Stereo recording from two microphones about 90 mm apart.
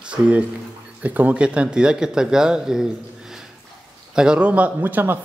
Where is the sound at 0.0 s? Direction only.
15° right (ahead or behind).